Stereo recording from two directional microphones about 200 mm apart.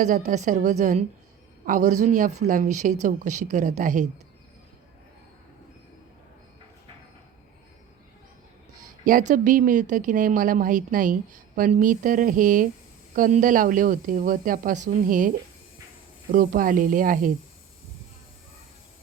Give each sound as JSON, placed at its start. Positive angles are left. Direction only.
{"t": 0.0, "sound": "speech", "side_deg": -40}
{"t": 9.0, "sound": "speech", "side_deg": -40}
{"t": 16.3, "sound": "speech", "side_deg": -45}